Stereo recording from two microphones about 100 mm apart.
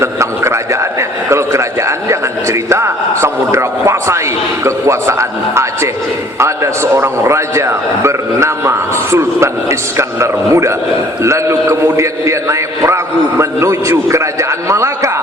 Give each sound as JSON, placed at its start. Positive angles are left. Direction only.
{"t": 0.0, "sound": "a sound", "side_deg": -30}
{"t": 1.3, "sound": "a man's voice", "side_deg": -30}
{"t": 6.4, "sound": "a man's voice", "side_deg": -30}